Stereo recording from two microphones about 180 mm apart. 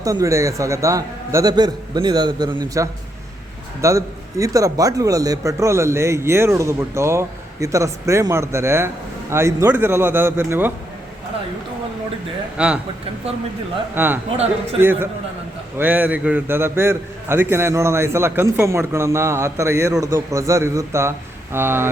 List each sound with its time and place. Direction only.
0.0 s a man's voice: 20° right (ahead or behind)
12.5 s a man's voice: 5° right (ahead or behind)
13.9 s a man's voice: 10° right (ahead or behind)
14.3 s a man's voice: 35° right (ahead or behind)
14.8 s a man's voice: 10° right (ahead or behind)